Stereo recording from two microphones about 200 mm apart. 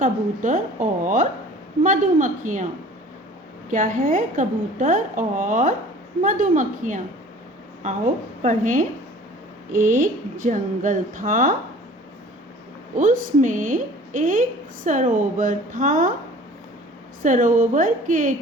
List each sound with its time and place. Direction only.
0.0 s a woman's voice: 40° right (ahead or behind)
3.7 s a woman's voice: 40° right (ahead or behind)
8.4 s a woman's voice: 40° right (ahead or behind)
13.0 s a woman's voice: 40° right (ahead or behind)
17.2 s a woman's voice: 40° right (ahead or behind)